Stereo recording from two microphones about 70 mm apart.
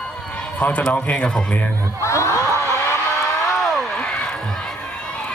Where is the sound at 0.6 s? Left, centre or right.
Left.